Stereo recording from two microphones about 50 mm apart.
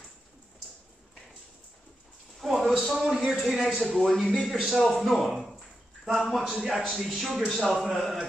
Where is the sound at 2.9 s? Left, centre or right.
Centre.